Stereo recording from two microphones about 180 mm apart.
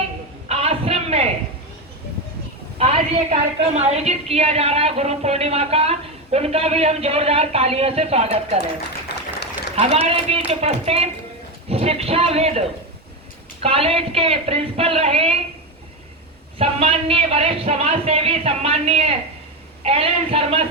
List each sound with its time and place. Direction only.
0.4 s a sound: 35° right (ahead or behind)
2.7 s a woman's voice: 35° right (ahead or behind)
9.0 s applause: 70° left (ahead or behind)
9.7 s a woman's voice: 35° right (ahead or behind)
16.6 s a woman's voice: 35° right (ahead or behind)